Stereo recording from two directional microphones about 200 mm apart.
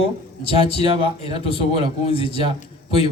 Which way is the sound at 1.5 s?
30° left (ahead or behind).